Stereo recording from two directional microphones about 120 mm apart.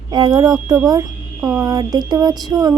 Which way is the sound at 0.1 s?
35° right (ahead or behind).